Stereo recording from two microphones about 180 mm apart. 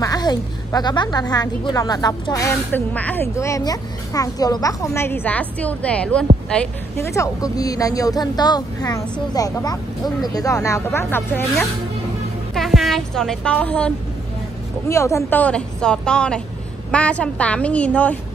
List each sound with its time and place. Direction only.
0.0 s a woman's voice: 20° left (ahead or behind)
12.5 s a woman's voice: centre (ahead or behind)